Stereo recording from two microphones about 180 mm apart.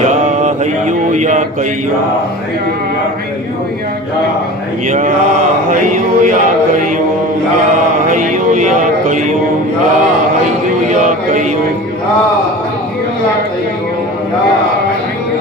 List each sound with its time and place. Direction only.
0.0 s mantra: 40° right (ahead or behind)
4.9 s music: 45° right (ahead or behind)
8.1 s music: 45° right (ahead or behind)
10.8 s music: 45° right (ahead or behind)